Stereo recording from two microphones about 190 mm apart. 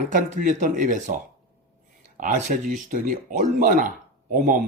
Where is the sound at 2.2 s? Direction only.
45° right (ahead or behind).